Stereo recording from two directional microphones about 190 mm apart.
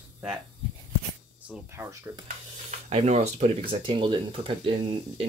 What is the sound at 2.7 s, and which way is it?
Speech, 35° right (ahead or behind).